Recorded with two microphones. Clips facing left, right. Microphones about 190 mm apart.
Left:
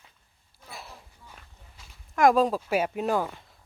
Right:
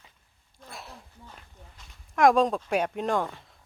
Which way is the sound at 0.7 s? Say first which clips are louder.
Even; centre (ahead or behind).